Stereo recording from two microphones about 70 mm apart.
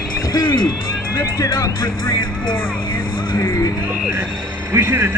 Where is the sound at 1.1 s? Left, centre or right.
Left.